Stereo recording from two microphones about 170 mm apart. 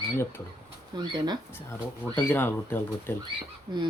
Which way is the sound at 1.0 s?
25° right (ahead or behind).